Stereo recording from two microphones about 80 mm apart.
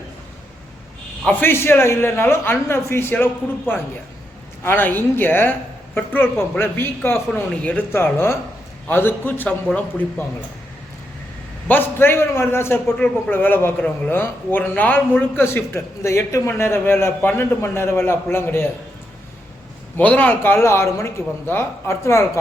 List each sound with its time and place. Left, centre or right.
1.3 s a man's voice: left
4.6 s a man's voice: left
7.5 s speech: centre
7.9 s a man's voice: left
11.7 s a man's voice: left
13.7 s speech: centre
14.1 s a man's voice: left
20.0 s a man's voice: centre; by 22.3 s left